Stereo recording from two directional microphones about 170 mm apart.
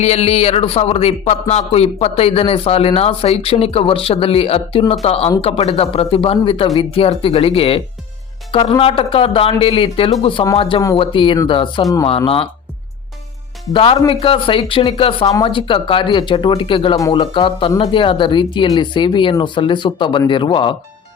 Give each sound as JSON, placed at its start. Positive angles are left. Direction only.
{"t": 0.0, "sound": "speech", "side_deg": 40}
{"t": 12.0, "sound": "speech", "side_deg": 35}
{"t": 13.7, "sound": "speech", "side_deg": 30}